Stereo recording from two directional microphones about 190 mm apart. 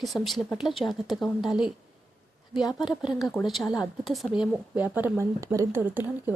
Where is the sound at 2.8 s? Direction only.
5° right (ahead or behind).